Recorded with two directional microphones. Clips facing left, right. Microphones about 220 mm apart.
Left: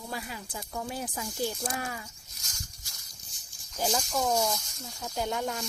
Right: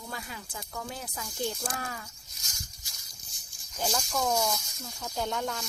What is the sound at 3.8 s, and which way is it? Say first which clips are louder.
Speech: left 2 dB; 5° left (ahead or behind).